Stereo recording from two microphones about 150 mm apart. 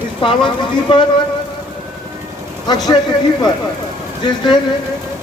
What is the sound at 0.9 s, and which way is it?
Speech, 30° left (ahead or behind).